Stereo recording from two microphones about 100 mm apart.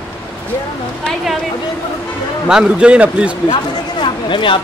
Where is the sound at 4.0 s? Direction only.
55° left (ahead or behind).